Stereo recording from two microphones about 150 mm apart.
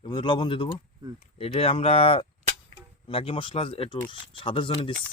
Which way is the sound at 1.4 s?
40° left (ahead or behind).